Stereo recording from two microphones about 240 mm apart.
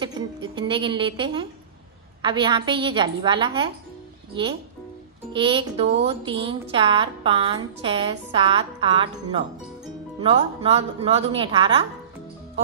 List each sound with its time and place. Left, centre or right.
0.0 s a woman's voice: centre